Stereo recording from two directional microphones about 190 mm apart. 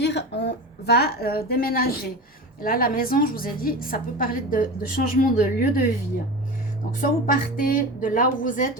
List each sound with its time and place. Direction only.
0.0 s a woman's voice: 65° left (ahead or behind)
7.0 s a woman's voice: 45° left (ahead or behind)